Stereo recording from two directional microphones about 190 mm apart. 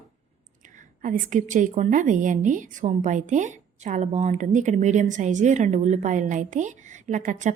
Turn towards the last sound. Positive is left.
turn(degrees=-40)  # may be behind; listen again after turning